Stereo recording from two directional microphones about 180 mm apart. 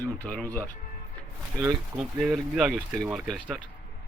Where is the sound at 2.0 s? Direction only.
5° right (ahead or behind).